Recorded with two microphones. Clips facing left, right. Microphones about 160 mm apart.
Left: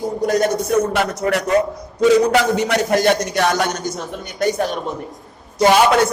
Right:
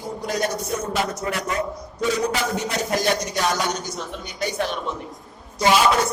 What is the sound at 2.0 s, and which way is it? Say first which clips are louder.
A man's voice: left 10 dB; 85° left.